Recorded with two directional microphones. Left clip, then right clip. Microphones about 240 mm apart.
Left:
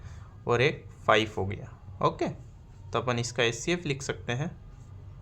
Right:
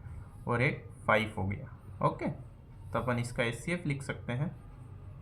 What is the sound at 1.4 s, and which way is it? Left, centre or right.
Speech, left.